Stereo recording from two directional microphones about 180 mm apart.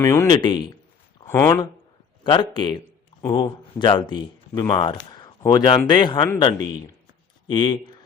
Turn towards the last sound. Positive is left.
turn(degrees=25)  # may be behind; listen again after turning